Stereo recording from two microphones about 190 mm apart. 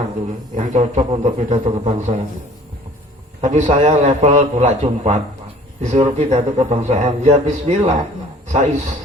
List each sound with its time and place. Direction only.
0.5 s a man's voice: 40° right (ahead or behind)
3.4 s a man's voice: 35° right (ahead or behind)